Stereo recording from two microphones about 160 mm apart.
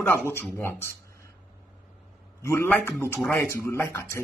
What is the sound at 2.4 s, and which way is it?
A man's voice, 15° left (ahead or behind).